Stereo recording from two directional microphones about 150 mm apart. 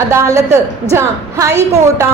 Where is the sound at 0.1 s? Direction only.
20° right (ahead or behind).